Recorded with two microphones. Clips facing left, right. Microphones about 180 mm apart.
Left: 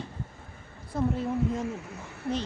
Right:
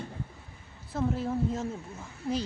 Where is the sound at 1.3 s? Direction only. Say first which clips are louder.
Left 2 dB; 85° left.